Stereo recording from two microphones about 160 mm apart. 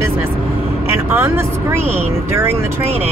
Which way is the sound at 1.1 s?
15° right (ahead or behind).